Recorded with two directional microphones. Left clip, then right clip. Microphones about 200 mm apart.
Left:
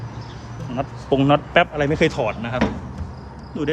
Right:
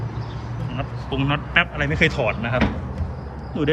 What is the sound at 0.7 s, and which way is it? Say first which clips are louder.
Speech: left 8 dB; 45° left (ahead or behind).